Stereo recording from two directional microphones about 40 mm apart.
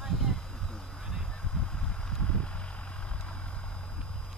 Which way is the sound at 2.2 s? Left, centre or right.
Left.